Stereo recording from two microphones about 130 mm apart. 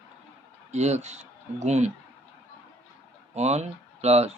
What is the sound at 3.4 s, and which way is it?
Speech, 55° right (ahead or behind).